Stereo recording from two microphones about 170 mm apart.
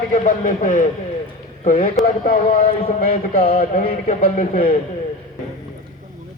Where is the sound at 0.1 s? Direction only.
50° left (ahead or behind).